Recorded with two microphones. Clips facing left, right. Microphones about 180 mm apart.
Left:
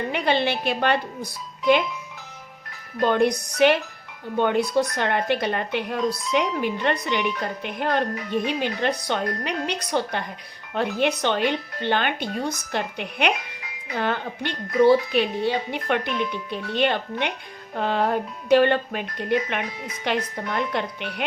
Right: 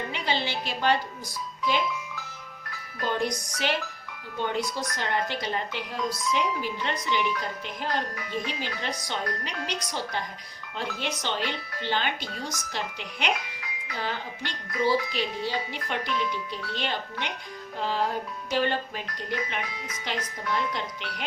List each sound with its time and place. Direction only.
0.1 s a woman's voice: 60° left (ahead or behind)
3.0 s a woman's voice: 60° left (ahead or behind)